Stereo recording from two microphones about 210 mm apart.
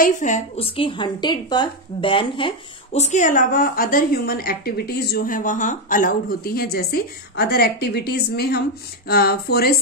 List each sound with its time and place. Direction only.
0.0 s a woman's voice: 35° left (ahead or behind)